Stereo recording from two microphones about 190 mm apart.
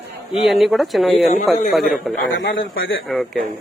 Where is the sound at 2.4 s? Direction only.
80° left.